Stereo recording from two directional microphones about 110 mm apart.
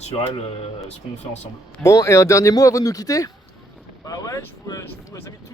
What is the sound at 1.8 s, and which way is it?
Speech, 25° left (ahead or behind).